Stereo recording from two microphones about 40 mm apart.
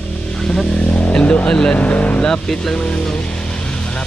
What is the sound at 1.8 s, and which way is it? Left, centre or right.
Speech, left.